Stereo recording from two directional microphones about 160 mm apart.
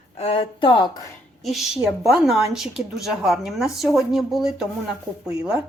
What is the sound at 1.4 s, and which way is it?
A woman's voice, centre (ahead or behind).